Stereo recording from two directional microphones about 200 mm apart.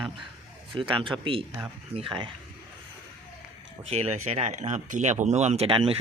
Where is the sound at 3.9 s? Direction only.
30° right (ahead or behind).